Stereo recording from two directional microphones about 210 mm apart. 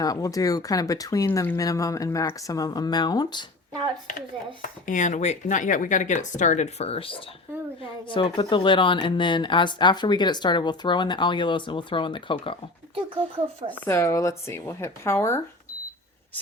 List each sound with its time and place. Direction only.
0.0 s speech: 15° left (ahead or behind)
4.9 s speech: 35° left (ahead or behind)
13.7 s speech: 10° left (ahead or behind)